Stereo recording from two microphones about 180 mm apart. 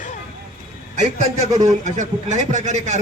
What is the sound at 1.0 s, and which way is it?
A man's voice, 40° right (ahead or behind).